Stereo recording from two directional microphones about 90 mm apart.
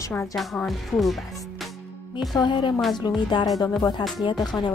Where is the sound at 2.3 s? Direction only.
55° left (ahead or behind).